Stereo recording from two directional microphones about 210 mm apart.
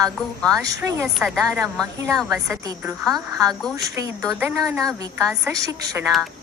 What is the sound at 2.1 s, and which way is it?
Speech, centre (ahead or behind).